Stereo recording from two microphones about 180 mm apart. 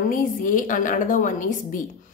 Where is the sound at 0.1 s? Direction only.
50° left (ahead or behind).